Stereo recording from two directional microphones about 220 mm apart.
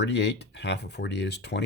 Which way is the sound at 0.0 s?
50° left (ahead or behind).